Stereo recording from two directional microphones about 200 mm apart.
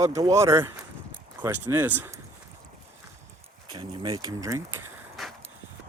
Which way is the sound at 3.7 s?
20° right (ahead or behind).